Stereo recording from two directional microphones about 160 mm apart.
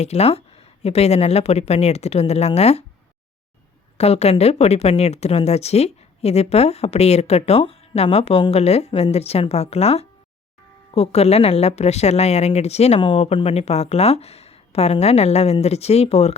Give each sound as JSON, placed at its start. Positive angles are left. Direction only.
{"t": 0.0, "sound": "a woman's voice", "side_deg": 40}
{"t": 3.9, "sound": "a woman's voice", "side_deg": 40}